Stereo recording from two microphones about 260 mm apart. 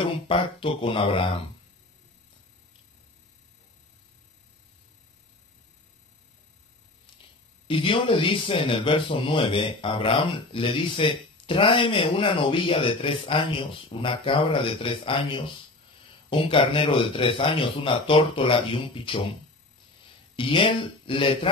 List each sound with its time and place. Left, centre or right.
0.0 s speech: centre
7.6 s speech: centre
20.3 s speech: centre